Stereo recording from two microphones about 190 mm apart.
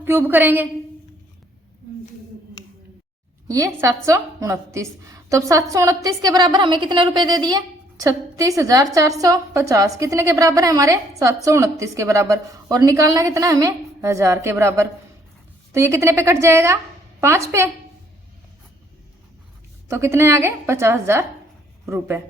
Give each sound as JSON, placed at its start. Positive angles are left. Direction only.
{"t": 0.0, "sound": "a woman's voice", "side_deg": -10}
{"t": 3.4, "sound": "a woman's voice", "side_deg": -15}
{"t": 19.9, "sound": "a woman's voice", "side_deg": -15}